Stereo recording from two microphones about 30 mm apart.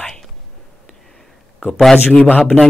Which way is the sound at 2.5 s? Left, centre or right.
Left.